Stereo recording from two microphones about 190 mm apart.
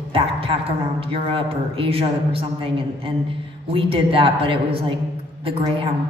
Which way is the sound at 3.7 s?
30° right (ahead or behind).